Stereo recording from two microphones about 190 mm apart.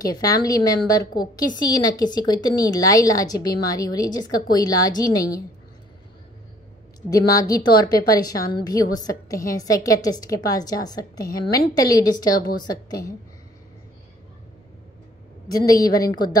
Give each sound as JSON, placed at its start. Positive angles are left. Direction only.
{"t": 0.0, "sound": "a woman's voice", "side_deg": 20}
{"t": 7.1, "sound": "a woman's voice", "side_deg": 20}
{"t": 15.5, "sound": "a woman's voice", "side_deg": 20}